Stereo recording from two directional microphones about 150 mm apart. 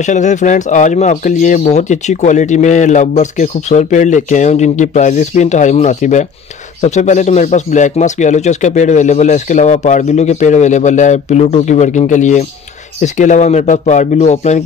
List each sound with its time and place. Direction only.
0.0 s speech: 55° left (ahead or behind)